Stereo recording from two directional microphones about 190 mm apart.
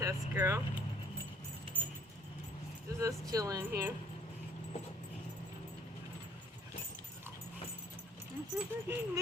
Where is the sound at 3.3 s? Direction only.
20° right (ahead or behind).